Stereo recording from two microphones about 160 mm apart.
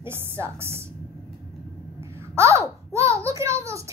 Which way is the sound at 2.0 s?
20° right (ahead or behind).